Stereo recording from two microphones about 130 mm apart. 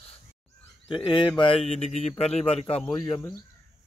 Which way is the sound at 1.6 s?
50° left (ahead or behind).